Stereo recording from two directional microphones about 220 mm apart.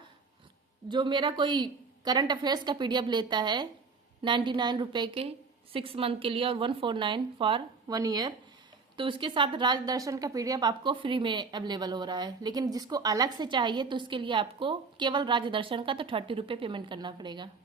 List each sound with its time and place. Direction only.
0.9 s a woman's voice: 20° right (ahead or behind)